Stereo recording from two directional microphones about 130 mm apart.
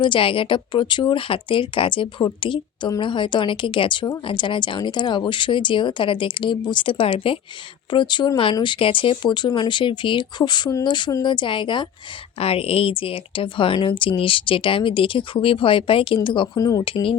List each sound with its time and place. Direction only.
0.0 s speech: 40° left (ahead or behind)
12.4 s a woman's voice: 50° left (ahead or behind)